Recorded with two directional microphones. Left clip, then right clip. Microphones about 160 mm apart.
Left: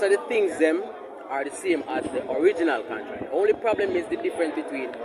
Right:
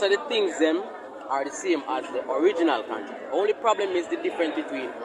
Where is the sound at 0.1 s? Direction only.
15° left (ahead or behind).